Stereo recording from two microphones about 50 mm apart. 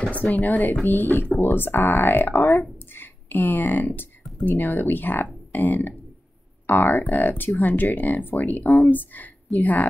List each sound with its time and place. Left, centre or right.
0.1 s speech: left